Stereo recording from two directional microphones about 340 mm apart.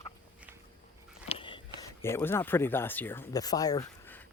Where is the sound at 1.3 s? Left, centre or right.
Centre.